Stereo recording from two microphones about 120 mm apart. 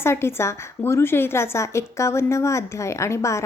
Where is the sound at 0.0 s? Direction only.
20° left (ahead or behind).